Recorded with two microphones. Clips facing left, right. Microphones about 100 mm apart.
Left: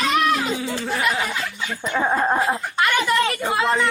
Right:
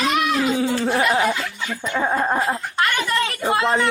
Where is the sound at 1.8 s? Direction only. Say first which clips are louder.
Left 1 dB; 10° left (ahead or behind).